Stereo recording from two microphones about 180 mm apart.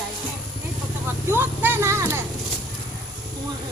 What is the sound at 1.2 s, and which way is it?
Speech, 10° right (ahead or behind).